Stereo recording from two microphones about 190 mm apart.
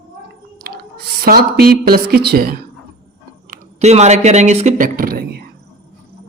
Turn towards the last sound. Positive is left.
turn(degrees=-50)  # may be behind; listen again after turning